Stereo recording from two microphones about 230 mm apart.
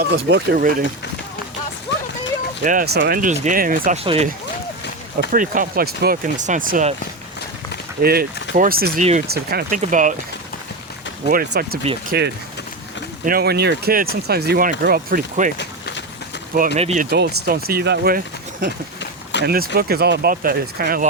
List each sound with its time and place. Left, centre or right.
0.1 s speech: right
2.6 s speech: right
4.0 s speech: right
5.3 s speech: right
8.0 s speech: right
11.3 s speech: right
15.5 s a sound: left
16.7 s speech: right
18.9 s a sound: left
19.5 s speech: right